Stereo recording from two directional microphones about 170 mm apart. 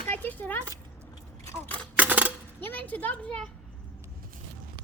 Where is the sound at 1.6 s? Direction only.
10° left (ahead or behind).